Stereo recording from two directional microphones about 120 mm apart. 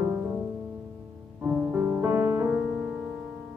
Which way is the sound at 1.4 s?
15° right (ahead or behind).